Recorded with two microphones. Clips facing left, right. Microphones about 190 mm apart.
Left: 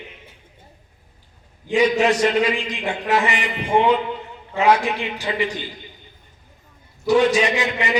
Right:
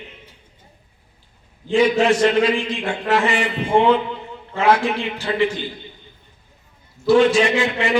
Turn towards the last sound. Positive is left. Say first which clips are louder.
# right 3 dB
turn(degrees=15)  # may be behind; listen again after turning